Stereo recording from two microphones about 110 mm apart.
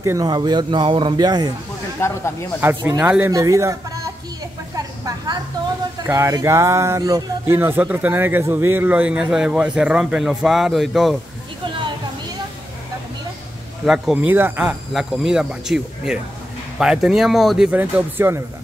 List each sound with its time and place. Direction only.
0.0 s a man's voice: 30° right (ahead or behind)
2.0 s speech: 20° left (ahead or behind)
2.6 s speech: 15° right (ahead or behind)
3.2 s a man's voice: 30° right (ahead or behind)
4.7 s vehicle: 35° right (ahead or behind)
6.0 s speech: 30° right (ahead or behind)
7.4 s a man's voice: 20° right (ahead or behind); by 11.1 s centre (ahead or behind)
11.6 s a sound: 45° right (ahead or behind)
13.8 s a man's voice: centre (ahead or behind)
14.1 s speech: 15° right (ahead or behind)
15.0 s a man's voice: 5° right (ahead or behind)
17.6 s speech: 15° right (ahead or behind)